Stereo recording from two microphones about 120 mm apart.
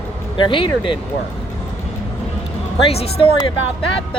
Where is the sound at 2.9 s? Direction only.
55° left (ahead or behind).